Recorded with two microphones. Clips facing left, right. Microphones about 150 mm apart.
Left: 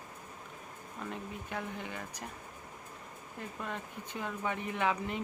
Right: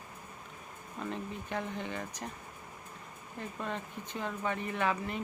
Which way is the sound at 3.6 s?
10° left (ahead or behind).